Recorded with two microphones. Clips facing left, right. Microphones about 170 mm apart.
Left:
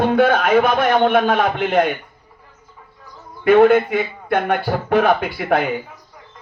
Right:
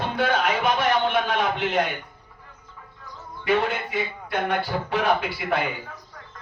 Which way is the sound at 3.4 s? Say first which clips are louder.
Left 12 dB; 55° left (ahead or behind).